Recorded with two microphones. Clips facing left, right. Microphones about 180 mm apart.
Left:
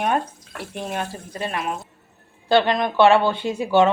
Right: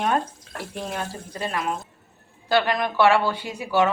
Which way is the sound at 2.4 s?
25° left (ahead or behind).